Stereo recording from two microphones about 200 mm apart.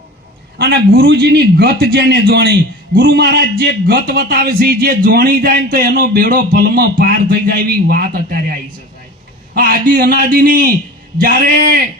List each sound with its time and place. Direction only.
0.6 s speech: 50° right (ahead or behind)